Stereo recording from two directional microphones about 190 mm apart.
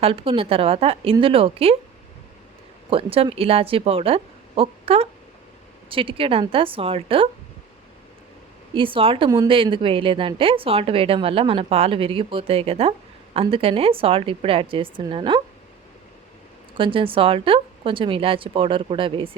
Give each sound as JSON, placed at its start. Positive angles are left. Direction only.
{"t": 0.0, "sound": "a woman's voice", "side_deg": -30}
{"t": 2.9, "sound": "a woman's voice", "side_deg": -30}
{"t": 8.7, "sound": "a woman's voice", "side_deg": -25}
{"t": 16.7, "sound": "a woman's voice", "side_deg": -25}